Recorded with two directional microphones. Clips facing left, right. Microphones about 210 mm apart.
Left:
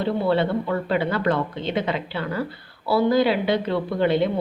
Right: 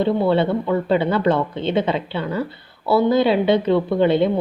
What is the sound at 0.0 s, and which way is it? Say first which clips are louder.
A woman's voice: right 4 dB; 25° right (ahead or behind).